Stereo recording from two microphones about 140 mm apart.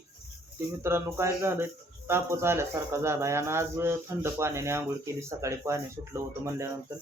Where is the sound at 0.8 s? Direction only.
20° right (ahead or behind).